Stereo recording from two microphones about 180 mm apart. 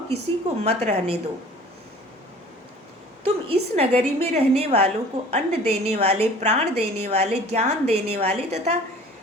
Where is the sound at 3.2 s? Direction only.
35° right (ahead or behind).